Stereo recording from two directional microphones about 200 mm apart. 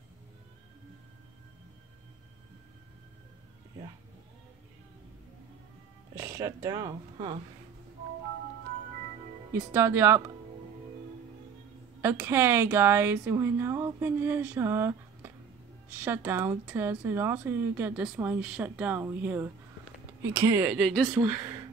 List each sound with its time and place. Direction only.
6.1 s speech: 15° right (ahead or behind)
9.5 s speech: 10° right (ahead or behind)
12.0 s speech: 10° right (ahead or behind)
20.7 s speech: centre (ahead or behind)